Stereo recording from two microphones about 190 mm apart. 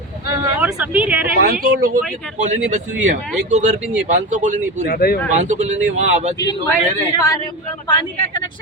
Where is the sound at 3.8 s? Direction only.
5° right (ahead or behind).